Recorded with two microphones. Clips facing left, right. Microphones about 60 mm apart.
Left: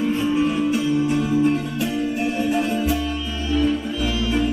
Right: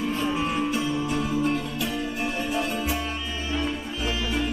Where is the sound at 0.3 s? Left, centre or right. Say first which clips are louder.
Left 6 dB; right.